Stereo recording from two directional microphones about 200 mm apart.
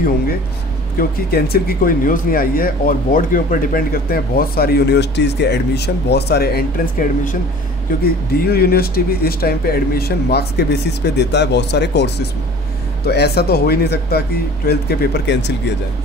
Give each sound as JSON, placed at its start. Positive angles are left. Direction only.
{"t": 0.9, "sound": "speech", "side_deg": 50}